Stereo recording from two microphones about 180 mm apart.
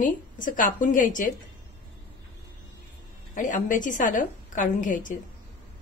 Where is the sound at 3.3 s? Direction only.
45° left (ahead or behind).